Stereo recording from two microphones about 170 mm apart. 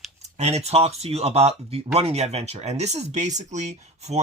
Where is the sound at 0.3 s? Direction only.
40° right (ahead or behind).